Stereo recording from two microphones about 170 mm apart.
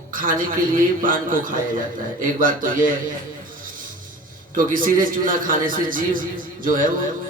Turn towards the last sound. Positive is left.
turn(degrees=-55)  # may be behind; listen again after turning